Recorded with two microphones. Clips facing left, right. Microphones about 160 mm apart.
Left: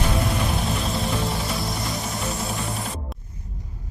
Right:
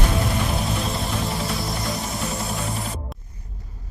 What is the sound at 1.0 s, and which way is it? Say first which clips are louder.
Music: left 1 dB; centre (ahead or behind).